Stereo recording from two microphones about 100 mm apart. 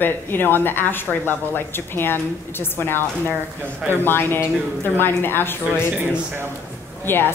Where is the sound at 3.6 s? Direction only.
25° right (ahead or behind).